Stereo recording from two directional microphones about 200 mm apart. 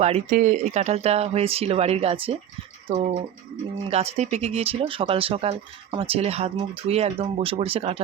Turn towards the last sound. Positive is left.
turn(degrees=-30)  # may be behind; listen again after turning